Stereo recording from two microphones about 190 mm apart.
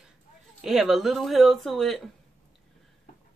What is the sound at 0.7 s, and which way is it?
Speech, centre (ahead or behind).